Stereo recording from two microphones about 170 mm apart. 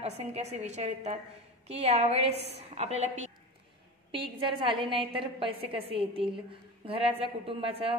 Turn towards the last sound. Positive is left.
turn(degrees=-35)  # may be behind; listen again after turning